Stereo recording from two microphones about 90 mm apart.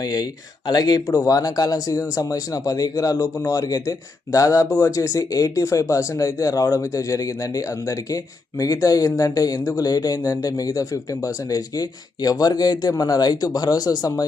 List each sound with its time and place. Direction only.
0.0 s speech: 45° left (ahead or behind)